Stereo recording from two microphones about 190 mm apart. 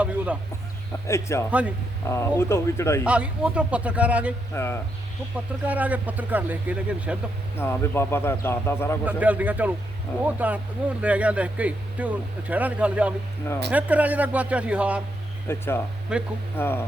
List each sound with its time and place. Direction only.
1.0 s speech: 15° left (ahead or behind)
1.5 s speech: 5° right (ahead or behind)
2.0 s speech: 15° left (ahead or behind)
3.0 s speech: 5° right (ahead or behind)
4.5 s speech: 15° left (ahead or behind)
5.6 s speech: 10° right (ahead or behind)
7.6 s speech: 10° left (ahead or behind)
9.0 s speech: 10° right (ahead or behind)
15.4 s speech: 10° left (ahead or behind)
16.1 s speech: 5° right (ahead or behind)
16.6 s speech: 10° left (ahead or behind)